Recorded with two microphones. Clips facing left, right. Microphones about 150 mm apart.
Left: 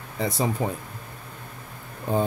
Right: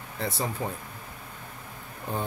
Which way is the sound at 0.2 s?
15° left (ahead or behind).